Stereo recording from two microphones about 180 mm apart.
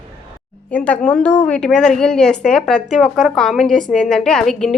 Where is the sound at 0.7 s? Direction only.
10° left (ahead or behind).